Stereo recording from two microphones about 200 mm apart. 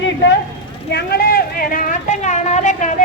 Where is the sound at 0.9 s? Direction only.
50° left (ahead or behind).